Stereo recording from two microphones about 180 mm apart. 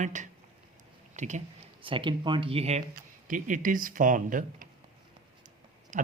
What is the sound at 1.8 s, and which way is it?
Speech, 30° right (ahead or behind).